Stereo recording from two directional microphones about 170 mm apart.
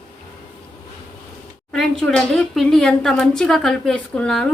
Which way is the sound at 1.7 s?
5° left (ahead or behind).